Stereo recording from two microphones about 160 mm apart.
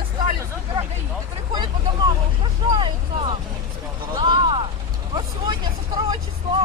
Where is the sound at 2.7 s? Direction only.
30° right (ahead or behind).